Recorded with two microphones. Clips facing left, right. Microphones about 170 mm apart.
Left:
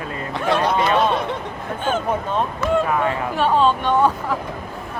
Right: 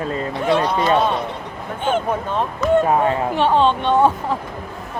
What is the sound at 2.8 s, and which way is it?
Speech, 35° right (ahead or behind).